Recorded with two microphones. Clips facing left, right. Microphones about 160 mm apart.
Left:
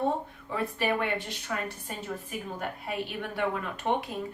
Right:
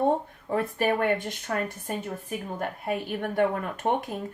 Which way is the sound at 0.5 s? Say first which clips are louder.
Right 4 dB; 45° right (ahead or behind).